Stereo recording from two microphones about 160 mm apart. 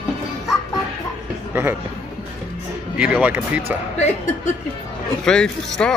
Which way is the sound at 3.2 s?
10° right (ahead or behind).